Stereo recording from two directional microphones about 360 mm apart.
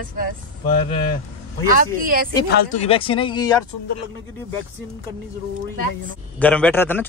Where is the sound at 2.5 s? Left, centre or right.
Centre.